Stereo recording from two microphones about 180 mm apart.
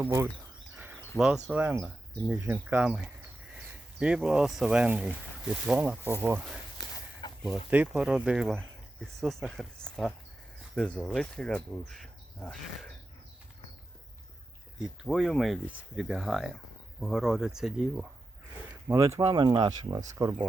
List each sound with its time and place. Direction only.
0.0 s speech: 15° right (ahead or behind)
1.2 s speech: 5° right (ahead or behind)
14.8 s speech: centre (ahead or behind)
18.9 s speech: 15° right (ahead or behind)